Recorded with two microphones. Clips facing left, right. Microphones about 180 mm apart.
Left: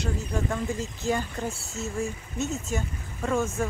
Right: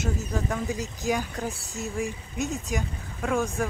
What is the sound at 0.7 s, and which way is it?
Speech, 15° right (ahead or behind).